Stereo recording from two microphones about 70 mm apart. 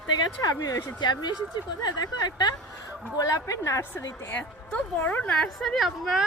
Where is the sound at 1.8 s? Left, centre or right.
Left.